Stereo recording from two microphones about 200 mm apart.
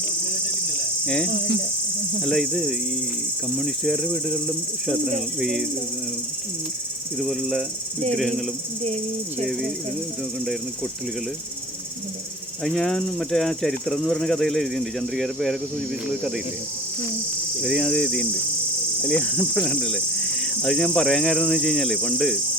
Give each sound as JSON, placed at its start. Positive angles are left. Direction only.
{"t": 1.0, "sound": "speech", "side_deg": 5}
{"t": 1.3, "sound": "speech", "side_deg": -50}
{"t": 2.2, "sound": "speech", "side_deg": 0}
{"t": 7.2, "sound": "speech", "side_deg": 0}
{"t": 12.6, "sound": "speech", "side_deg": 0}
{"t": 17.6, "sound": "speech", "side_deg": 0}